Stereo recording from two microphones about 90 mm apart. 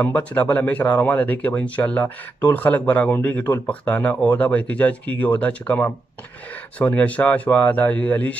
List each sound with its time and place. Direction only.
0.0 s speech: 15° left (ahead or behind)